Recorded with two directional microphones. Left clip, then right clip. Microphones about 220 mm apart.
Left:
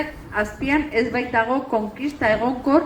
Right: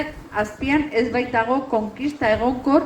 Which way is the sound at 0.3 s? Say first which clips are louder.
Even; 40° left (ahead or behind).